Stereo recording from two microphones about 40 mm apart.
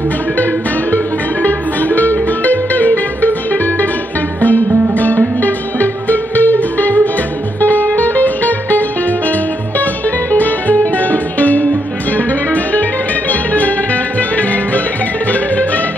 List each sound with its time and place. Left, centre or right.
0.9 s music: left
10.3 s music: left